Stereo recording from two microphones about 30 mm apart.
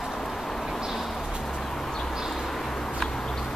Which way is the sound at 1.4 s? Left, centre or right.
Centre.